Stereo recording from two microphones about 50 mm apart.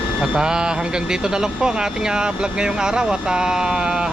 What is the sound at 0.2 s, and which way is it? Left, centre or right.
Speech, centre.